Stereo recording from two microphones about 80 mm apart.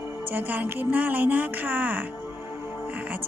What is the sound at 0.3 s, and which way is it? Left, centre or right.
A woman's voice, right.